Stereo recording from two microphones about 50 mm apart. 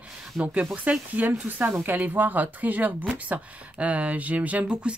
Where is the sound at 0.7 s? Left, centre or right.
Right.